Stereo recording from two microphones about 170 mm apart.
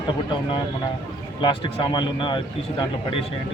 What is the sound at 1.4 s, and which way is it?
Speech, 30° left (ahead or behind).